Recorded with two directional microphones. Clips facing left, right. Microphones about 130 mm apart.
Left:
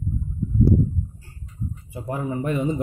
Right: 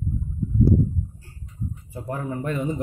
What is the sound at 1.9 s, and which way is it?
Speech, 20° left (ahead or behind).